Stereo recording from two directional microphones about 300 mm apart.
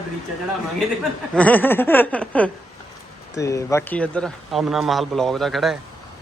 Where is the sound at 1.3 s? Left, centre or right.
Centre.